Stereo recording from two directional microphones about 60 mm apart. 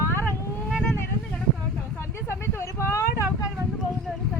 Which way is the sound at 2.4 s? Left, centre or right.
Left.